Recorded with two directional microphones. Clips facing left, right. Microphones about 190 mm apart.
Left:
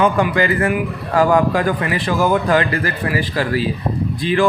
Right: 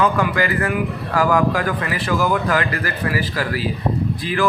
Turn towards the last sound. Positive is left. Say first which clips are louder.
# left 4 dB
turn(degrees=25)  # may be behind; listen again after turning